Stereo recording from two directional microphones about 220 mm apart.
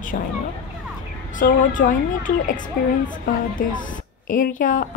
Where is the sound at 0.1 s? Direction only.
40° left (ahead or behind).